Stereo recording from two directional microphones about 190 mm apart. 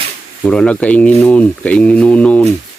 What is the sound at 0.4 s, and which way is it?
Speech, 5° left (ahead or behind).